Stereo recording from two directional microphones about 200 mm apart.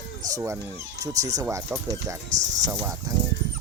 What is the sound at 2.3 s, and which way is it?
Speech, 35° right (ahead or behind).